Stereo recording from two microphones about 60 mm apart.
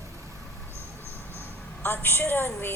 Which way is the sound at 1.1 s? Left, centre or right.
Left.